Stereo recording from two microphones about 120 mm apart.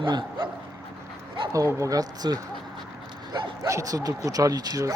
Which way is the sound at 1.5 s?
25° right (ahead or behind).